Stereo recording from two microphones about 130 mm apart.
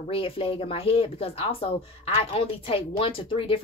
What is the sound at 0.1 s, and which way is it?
Speech, 45° left (ahead or behind).